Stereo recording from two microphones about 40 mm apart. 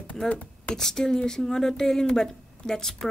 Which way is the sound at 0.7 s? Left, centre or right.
Centre.